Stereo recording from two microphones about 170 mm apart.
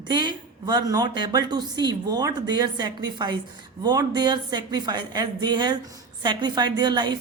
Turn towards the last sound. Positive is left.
turn(degrees=-25)  # may be behind; listen again after turning